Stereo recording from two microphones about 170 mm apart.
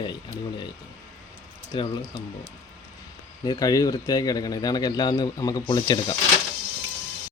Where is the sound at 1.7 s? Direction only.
25° left (ahead or behind).